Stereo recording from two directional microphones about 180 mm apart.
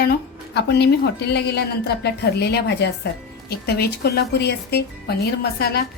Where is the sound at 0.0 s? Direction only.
65° left (ahead or behind).